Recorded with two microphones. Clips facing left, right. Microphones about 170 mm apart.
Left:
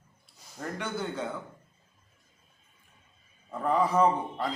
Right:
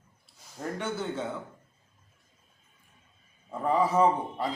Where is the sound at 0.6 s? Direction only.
5° right (ahead or behind).